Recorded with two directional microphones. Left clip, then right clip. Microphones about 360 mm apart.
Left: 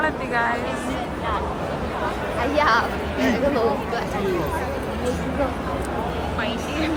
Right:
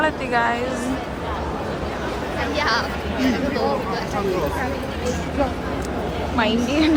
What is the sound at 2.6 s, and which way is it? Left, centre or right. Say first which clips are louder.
Speech: left 3 dB; centre.